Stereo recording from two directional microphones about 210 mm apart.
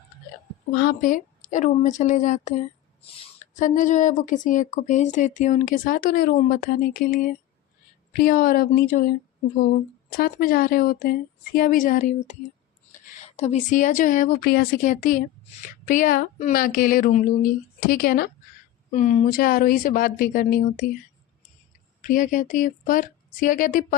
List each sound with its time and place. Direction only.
0.7 s a woman's voice: 50° left (ahead or behind)
18.9 s speech: 35° left (ahead or behind)
22.0 s a woman's voice: 40° left (ahead or behind)